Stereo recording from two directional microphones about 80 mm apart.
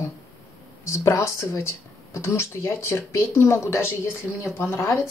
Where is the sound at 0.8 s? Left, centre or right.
Left.